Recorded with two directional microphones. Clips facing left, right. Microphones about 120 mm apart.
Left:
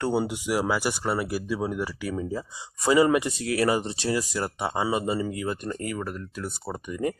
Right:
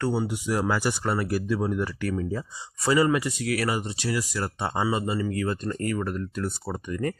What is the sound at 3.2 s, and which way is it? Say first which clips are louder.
Speech: left 2 dB; 25° left (ahead or behind).